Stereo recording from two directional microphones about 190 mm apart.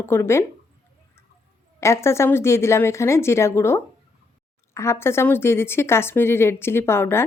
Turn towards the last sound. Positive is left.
turn(degrees=10)  # may be behind; listen again after turning